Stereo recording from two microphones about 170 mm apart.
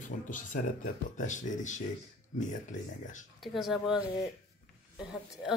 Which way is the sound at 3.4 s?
Centre (ahead or behind).